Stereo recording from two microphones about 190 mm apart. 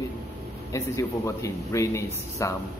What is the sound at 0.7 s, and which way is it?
A man's voice, 15° left (ahead or behind).